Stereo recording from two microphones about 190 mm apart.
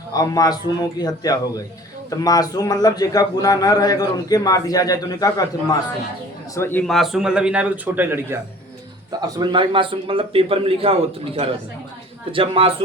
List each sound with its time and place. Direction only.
0.1 s a man's voice: 20° left (ahead or behind)
6.6 s a man's voice: 10° left (ahead or behind); by 8.4 s 10° right (ahead or behind)
9.4 s a man's voice: 25° right (ahead or behind)